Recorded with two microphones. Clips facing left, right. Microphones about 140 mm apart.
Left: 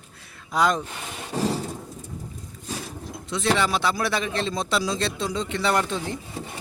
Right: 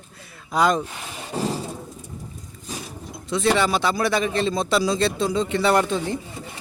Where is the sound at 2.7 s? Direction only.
5° right (ahead or behind).